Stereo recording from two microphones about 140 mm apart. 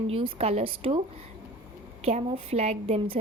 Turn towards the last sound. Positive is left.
turn(degrees=-45)  # may be behind; listen again after turning